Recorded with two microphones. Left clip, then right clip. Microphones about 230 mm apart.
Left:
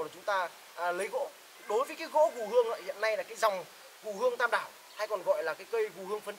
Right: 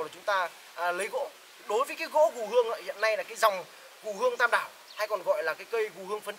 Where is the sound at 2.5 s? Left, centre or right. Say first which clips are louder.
Right 2 dB; centre.